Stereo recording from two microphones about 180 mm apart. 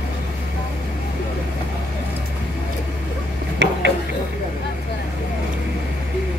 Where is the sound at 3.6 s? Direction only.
70° right (ahead or behind).